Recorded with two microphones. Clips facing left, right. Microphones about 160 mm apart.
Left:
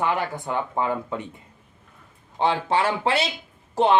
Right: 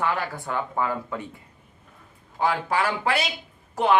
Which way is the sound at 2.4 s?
25° left (ahead or behind).